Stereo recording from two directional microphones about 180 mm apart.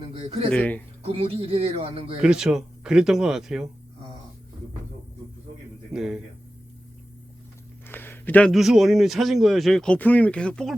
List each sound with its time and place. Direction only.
0.1 s speech: 35° right (ahead or behind)
0.5 s speech: 10° left (ahead or behind)
1.0 s a man's voice: 30° right (ahead or behind)
2.1 s a man's voice: 5° right (ahead or behind)
5.9 s a man's voice: 5° right (ahead or behind)
7.9 s a man's voice: 10° left (ahead or behind)